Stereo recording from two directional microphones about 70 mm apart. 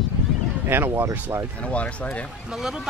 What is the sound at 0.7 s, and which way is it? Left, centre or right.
Speech, right.